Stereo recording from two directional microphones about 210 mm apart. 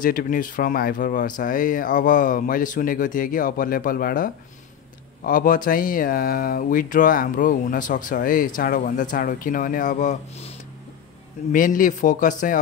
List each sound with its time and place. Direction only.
0.0 s speech: 45° left (ahead or behind)
11.5 s speech: 40° left (ahead or behind)